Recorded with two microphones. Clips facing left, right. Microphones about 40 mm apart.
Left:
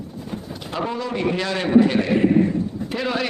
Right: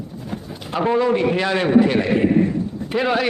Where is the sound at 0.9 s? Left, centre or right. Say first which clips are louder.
Right 13 dB; right.